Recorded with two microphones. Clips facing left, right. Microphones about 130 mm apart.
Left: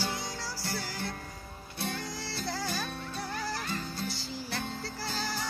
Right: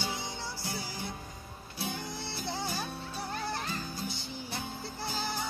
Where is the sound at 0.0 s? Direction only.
20° right (ahead or behind).